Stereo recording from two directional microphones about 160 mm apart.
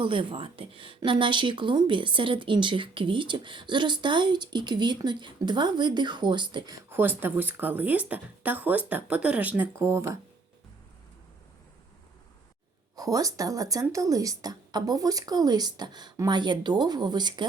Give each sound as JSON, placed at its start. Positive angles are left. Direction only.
{"t": 0.0, "sound": "speech", "side_deg": -35}
{"t": 6.9, "sound": "speech", "side_deg": -10}
{"t": 13.0, "sound": "speech", "side_deg": -20}